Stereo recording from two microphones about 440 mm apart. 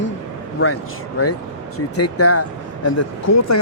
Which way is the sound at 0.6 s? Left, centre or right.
Left.